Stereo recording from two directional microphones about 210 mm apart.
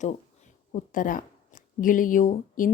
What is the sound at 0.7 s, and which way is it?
A woman's voice, 40° left (ahead or behind).